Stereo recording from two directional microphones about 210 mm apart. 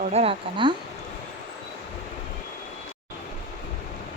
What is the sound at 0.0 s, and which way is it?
Speech, 30° right (ahead or behind).